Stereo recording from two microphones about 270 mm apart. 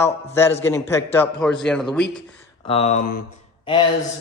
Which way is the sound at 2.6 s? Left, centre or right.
Left.